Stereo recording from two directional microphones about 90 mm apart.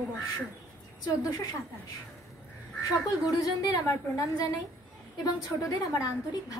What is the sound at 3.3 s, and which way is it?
A woman's voice, 45° left (ahead or behind).